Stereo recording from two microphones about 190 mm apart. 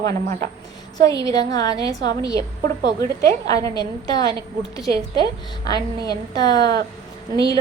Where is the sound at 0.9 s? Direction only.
20° left (ahead or behind).